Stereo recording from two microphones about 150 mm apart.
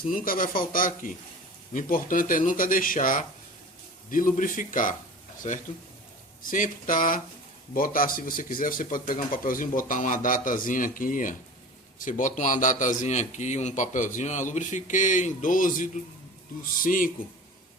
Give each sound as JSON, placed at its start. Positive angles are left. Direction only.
{"t": 0.1, "sound": "speech", "side_deg": 65}
{"t": 5.4, "sound": "speech", "side_deg": 50}
{"t": 6.4, "sound": "speech", "side_deg": 65}